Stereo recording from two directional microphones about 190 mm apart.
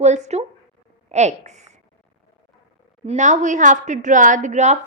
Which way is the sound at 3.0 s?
40° right (ahead or behind).